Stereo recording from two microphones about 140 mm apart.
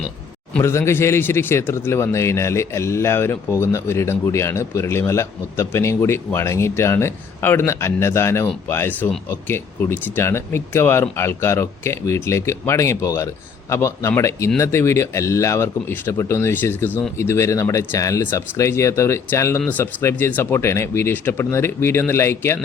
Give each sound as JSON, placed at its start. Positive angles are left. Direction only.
{"t": 0.6, "sound": "a man's voice", "side_deg": 20}